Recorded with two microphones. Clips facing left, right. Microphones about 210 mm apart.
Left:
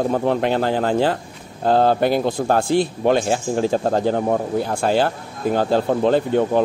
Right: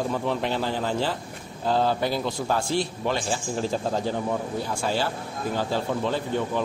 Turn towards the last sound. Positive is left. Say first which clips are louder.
# left 9 dB
turn(degrees=55)  # may be behind; listen again after turning